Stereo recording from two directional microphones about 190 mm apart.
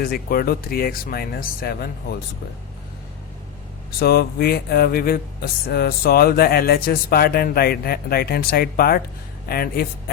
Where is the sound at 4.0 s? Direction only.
55° left (ahead or behind).